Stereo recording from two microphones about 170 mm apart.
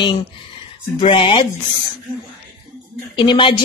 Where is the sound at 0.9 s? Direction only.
35° left (ahead or behind).